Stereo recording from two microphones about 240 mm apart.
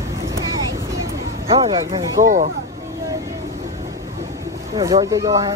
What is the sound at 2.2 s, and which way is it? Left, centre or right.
Speech, right.